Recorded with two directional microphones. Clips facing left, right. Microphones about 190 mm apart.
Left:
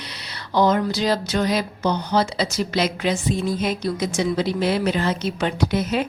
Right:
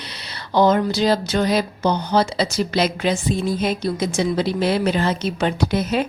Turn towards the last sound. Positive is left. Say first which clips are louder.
# right 1 dB
turn(degrees=-35)  # may be behind; listen again after turning